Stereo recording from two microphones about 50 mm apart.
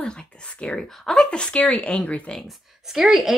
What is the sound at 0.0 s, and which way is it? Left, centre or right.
Whispering, centre.